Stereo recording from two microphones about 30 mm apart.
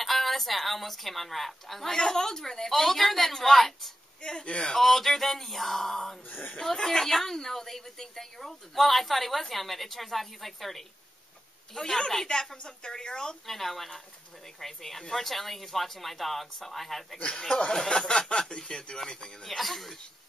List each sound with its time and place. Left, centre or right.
0.0 s a woman's voice: centre
1.9 s a woman's voice: centre
2.7 s a woman's voice: centre
4.2 s speech: left
4.7 s a woman's voice: centre
12.3 s speech: left
13.5 s speech: centre
17.6 s speech: left
19.4 s speech: centre